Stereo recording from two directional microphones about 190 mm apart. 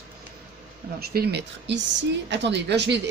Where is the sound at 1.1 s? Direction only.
55° right (ahead or behind).